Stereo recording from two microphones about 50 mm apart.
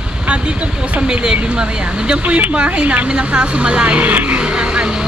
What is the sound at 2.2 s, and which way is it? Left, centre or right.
Speech, right.